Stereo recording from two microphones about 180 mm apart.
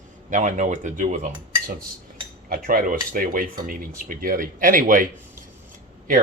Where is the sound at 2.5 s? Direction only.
50° right (ahead or behind).